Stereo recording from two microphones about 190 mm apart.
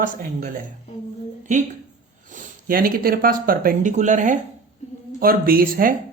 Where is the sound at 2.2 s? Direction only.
45° right (ahead or behind).